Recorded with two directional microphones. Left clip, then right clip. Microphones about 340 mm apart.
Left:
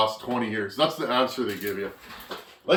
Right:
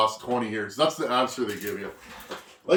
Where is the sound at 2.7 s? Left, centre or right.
Centre.